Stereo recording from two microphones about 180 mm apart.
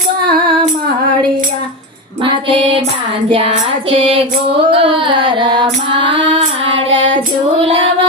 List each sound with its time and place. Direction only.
2.2 s a sound: 30° right (ahead or behind)
3.3 s music: 35° right (ahead or behind)
4.7 s carnatic music: 30° right (ahead or behind)
7.6 s music: 30° right (ahead or behind)